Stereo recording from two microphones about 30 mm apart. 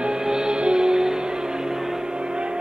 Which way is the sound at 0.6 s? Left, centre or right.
Right.